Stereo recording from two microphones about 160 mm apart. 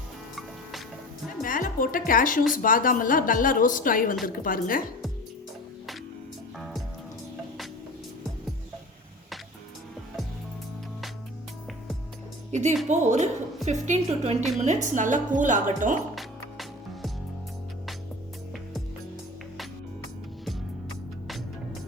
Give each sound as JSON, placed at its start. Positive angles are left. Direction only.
{"t": 1.5, "sound": "a woman's voice", "side_deg": 60}
{"t": 6.6, "sound": "music", "side_deg": 0}
{"t": 12.5, "sound": "speech", "side_deg": -45}
{"t": 16.1, "sound": "music", "side_deg": 0}